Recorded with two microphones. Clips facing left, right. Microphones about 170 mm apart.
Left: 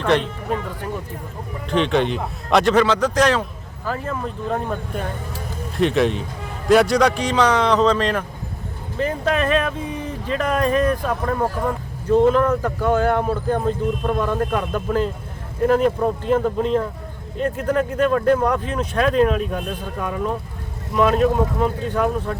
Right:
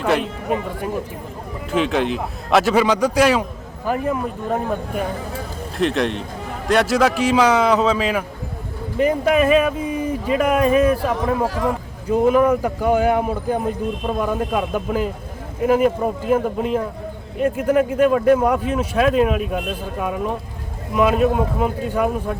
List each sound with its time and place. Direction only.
0.0 s a man's voice: 5° right (ahead or behind)
11.4 s speech: 90° right
12.0 s a man's voice: 10° right (ahead or behind)